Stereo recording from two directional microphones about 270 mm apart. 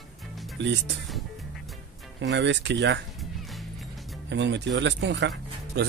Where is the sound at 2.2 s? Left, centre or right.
Right.